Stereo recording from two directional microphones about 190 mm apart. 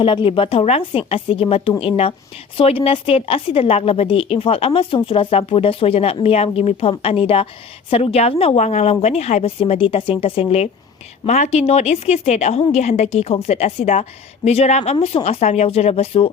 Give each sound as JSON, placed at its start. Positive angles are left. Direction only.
{"t": 0.0, "sound": "a woman's voice", "side_deg": 25}